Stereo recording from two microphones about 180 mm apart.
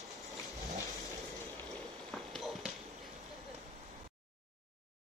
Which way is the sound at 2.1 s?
Centre (ahead or behind).